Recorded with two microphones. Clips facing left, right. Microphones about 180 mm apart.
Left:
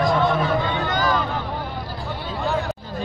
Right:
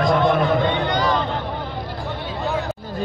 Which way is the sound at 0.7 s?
20° right (ahead or behind).